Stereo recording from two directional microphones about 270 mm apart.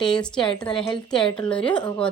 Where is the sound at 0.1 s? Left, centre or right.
Centre.